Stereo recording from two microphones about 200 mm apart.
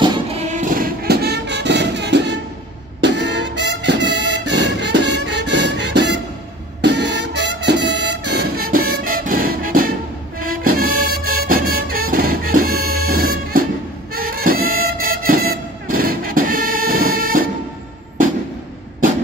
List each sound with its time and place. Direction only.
0.0 s music: 30° right (ahead or behind)